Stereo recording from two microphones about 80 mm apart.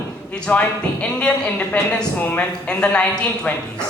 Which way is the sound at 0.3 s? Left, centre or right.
Centre.